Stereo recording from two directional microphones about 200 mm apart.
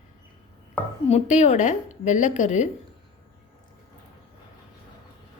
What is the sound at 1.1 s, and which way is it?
A woman's voice, 35° left (ahead or behind).